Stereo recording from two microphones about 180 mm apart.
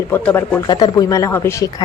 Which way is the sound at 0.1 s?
10° left (ahead or behind).